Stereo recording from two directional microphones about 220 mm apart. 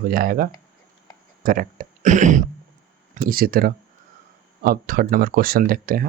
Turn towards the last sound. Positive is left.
turn(degrees=-40)  # may be behind; listen again after turning